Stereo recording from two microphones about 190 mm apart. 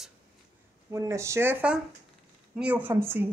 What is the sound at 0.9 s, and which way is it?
A woman's voice, 15° right (ahead or behind).